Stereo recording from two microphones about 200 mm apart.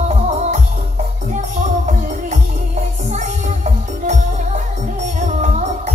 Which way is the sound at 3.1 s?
35° right (ahead or behind).